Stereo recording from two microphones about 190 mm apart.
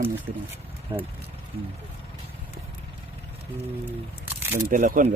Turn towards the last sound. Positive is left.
turn(degrees=-45)  # may be behind; listen again after turning